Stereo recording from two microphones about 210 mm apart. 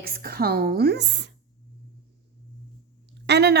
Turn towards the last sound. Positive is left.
turn(degrees=-55)  # may be behind; listen again after turning